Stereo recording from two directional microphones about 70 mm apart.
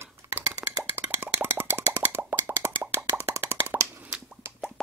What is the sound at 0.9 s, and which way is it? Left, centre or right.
Plop, right.